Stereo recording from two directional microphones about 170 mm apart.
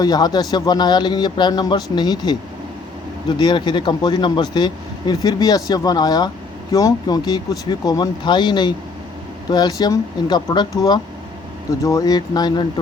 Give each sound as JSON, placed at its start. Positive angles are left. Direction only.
{"t": 0.0, "sound": "speech", "side_deg": 20}